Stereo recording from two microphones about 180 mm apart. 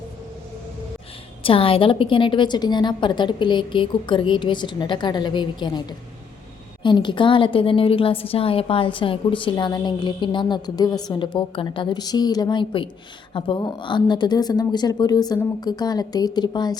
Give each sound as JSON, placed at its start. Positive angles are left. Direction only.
{"t": 1.5, "sound": "a woman's voice", "side_deg": 30}